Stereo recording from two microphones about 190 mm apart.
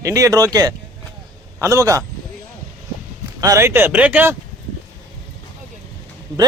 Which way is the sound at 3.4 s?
15° right (ahead or behind).